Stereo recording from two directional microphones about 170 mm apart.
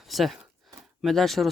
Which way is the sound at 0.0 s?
Centre (ahead or behind).